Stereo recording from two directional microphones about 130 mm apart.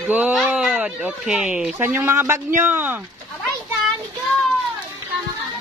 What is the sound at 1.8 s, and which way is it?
A man's voice, 20° right (ahead or behind).